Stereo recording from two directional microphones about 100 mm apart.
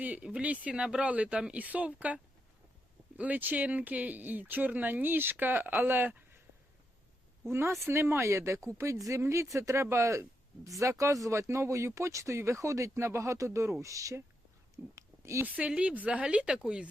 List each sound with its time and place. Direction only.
0.0 s speech: 15° right (ahead or behind)
7.5 s speech: 25° right (ahead or behind)
14.9 s a sound: 30° right (ahead or behind)
15.4 s speech: 15° right (ahead or behind)